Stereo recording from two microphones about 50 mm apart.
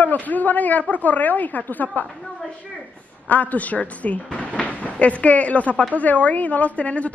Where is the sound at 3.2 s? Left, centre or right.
Left.